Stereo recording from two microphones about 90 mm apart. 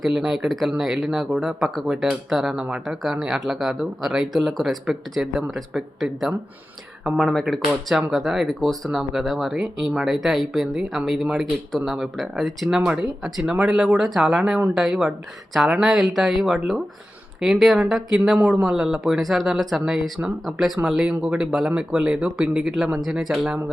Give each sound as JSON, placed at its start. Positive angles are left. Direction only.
{"t": 0.0, "sound": "speech", "side_deg": 0}
{"t": 2.8, "sound": "speech", "side_deg": -5}